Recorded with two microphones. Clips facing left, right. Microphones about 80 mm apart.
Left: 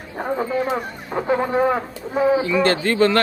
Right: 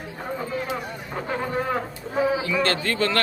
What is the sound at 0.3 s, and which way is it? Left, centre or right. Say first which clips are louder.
Speech: left 6 dB; left.